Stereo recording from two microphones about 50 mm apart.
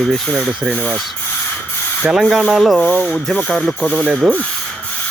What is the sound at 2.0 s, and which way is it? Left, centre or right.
Speech, right.